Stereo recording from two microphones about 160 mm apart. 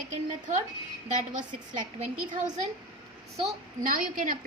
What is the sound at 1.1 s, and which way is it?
Speech, 50° right (ahead or behind).